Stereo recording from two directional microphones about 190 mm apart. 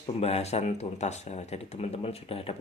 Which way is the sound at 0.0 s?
30° left (ahead or behind).